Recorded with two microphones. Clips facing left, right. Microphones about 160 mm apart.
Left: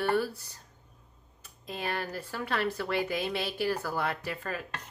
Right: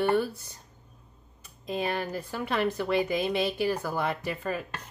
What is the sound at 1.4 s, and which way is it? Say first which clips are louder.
Speech: right 6 dB; 15° right (ahead or behind).